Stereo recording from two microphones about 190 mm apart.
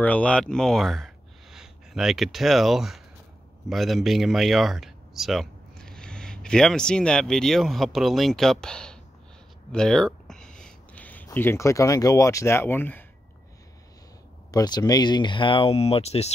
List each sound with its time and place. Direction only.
0.0 s speech: 5° left (ahead or behind)
9.7 s a sound: 5° left (ahead or behind)
11.2 s speech: 15° left (ahead or behind)
14.5 s speech: 20° left (ahead or behind)